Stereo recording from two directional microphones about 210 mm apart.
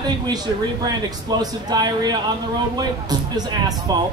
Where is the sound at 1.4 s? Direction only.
20° right (ahead or behind).